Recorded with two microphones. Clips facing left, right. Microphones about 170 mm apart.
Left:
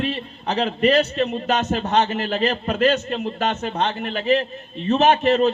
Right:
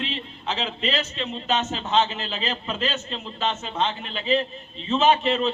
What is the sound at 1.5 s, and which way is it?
Speech, 40° left (ahead or behind).